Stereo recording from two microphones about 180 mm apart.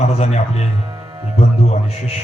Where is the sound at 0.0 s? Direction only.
35° left (ahead or behind).